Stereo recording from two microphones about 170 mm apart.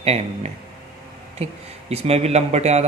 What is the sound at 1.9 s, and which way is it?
Speech, 40° right (ahead or behind).